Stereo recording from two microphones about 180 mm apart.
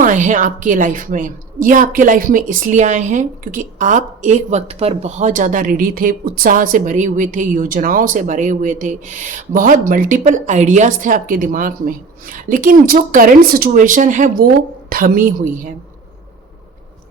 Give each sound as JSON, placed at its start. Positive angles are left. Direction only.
{"t": 0.0, "sound": "a woman's voice", "side_deg": -45}